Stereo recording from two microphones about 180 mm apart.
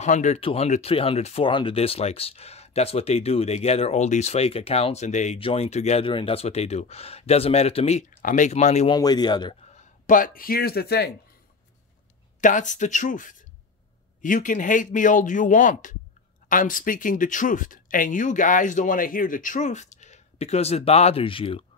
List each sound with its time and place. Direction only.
0.0 s speech: 40° left (ahead or behind)
8.9 s speech: 25° left (ahead or behind)
9.8 s speech: 45° left (ahead or behind); by 11.1 s 60° left (ahead or behind)
12.4 s speech: 45° left (ahead or behind)